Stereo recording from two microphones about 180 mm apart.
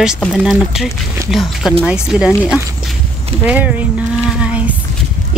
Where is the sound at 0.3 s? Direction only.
5° right (ahead or behind).